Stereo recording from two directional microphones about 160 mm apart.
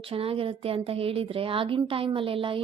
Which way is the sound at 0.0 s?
35° right (ahead or behind).